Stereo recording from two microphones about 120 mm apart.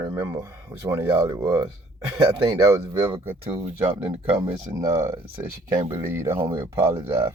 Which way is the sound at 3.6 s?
55° right (ahead or behind).